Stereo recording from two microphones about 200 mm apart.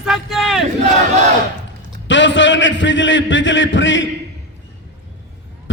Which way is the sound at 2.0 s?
65° left (ahead or behind).